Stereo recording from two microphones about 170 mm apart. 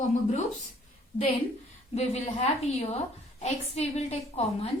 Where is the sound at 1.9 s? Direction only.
40° left (ahead or behind).